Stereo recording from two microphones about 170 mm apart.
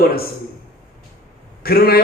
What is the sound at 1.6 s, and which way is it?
Speech, 65° left (ahead or behind).